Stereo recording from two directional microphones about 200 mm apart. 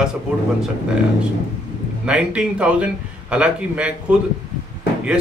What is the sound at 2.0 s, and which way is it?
Speech, 5° right (ahead or behind).